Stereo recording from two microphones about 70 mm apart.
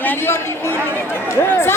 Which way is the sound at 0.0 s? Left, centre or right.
Left.